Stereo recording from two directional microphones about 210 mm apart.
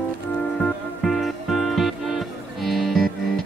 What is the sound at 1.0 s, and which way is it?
Music, centre (ahead or behind).